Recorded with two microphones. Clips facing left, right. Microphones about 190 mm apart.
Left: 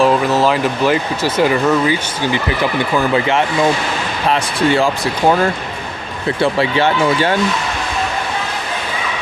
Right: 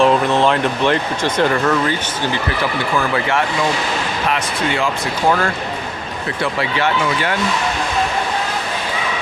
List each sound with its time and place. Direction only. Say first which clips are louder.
0.0 s speech: left 1 dB; 5° left (ahead or behind)
4.3 s speech: left 7 dB; 35° left (ahead or behind)
6.4 s speech: left 5 dB; 30° left (ahead or behind)